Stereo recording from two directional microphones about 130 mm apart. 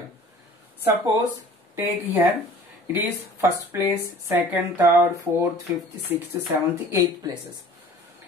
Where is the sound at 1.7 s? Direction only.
15° right (ahead or behind).